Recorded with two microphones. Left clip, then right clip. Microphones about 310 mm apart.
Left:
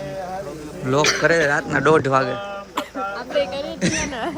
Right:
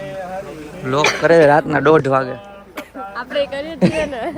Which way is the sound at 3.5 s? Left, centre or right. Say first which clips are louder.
Right 2 dB; right.